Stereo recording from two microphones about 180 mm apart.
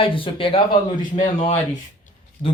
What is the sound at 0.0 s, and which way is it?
Speech, 30° left (ahead or behind).